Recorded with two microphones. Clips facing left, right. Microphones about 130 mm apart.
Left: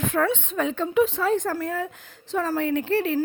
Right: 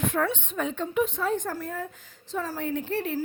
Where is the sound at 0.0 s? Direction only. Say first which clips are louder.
Left 3 dB; 90° left.